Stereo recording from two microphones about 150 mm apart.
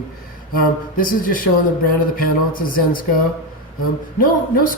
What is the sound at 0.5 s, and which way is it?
Speech, 75° left (ahead or behind).